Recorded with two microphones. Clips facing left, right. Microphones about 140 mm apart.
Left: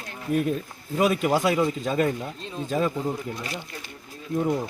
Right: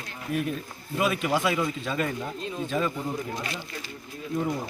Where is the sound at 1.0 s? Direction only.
40° left (ahead or behind).